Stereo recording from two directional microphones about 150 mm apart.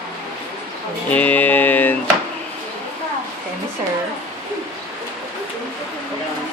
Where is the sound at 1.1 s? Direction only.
10° left (ahead or behind).